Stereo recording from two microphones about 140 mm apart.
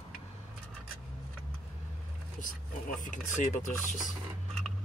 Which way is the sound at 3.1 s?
55° left (ahead or behind).